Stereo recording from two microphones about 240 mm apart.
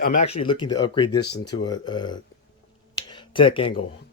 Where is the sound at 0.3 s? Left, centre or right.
Left.